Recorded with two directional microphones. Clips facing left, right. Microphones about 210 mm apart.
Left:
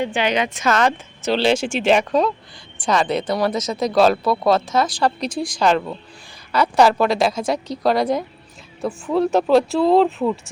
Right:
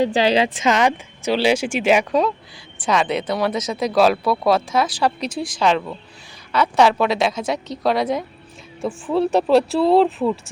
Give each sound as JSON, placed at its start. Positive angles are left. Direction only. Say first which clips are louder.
{"t": 0.0, "sound": "a woman's voice", "louder": "right 4 dB", "side_deg": -35}
{"t": 0.7, "sound": "speech", "louder": "left 2 dB", "side_deg": -15}